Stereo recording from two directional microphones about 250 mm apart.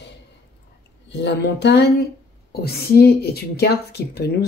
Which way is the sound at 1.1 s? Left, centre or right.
Left.